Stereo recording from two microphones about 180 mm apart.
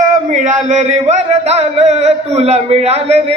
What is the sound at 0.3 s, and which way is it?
A man's voice, 45° right (ahead or behind).